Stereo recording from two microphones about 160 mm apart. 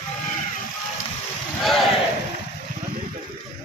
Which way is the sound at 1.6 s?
Centre (ahead or behind).